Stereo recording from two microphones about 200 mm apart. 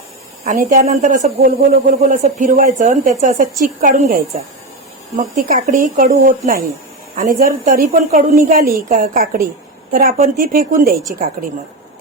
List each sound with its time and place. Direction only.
0.4 s a woman's voice: 40° right (ahead or behind)